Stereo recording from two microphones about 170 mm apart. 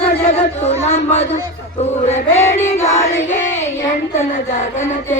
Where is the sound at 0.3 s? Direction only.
40° left (ahead or behind).